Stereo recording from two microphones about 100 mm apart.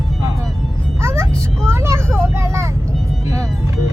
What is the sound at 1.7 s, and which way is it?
Vehicle, 25° right (ahead or behind).